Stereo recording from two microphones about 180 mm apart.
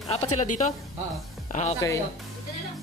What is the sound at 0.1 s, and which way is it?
Speech, 35° left (ahead or behind).